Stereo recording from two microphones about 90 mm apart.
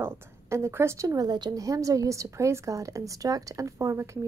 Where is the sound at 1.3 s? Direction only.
50° right (ahead or behind); by 4.1 s 35° right (ahead or behind).